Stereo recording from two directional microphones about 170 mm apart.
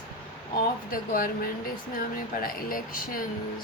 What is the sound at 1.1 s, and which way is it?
Speech, 55° left (ahead or behind).